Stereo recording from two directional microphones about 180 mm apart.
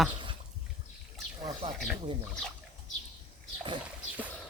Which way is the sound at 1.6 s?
35° right (ahead or behind).